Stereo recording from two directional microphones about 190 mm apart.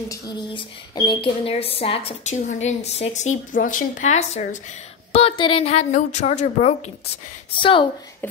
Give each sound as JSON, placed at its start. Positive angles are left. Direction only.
{"t": 0.1, "sound": "a woman's voice", "side_deg": 20}